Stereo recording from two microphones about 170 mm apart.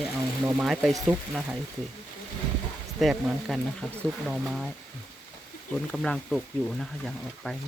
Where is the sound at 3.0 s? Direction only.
Centre (ahead or behind).